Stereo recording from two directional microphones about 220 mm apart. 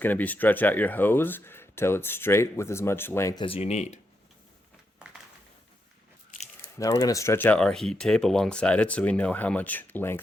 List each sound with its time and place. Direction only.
0.0 s speech: 10° left (ahead or behind)
3.4 s speech: 25° left (ahead or behind)
6.7 s speech: 15° left (ahead or behind)